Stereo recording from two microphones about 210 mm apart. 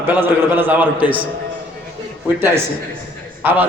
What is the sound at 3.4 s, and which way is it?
Speech, 10° right (ahead or behind).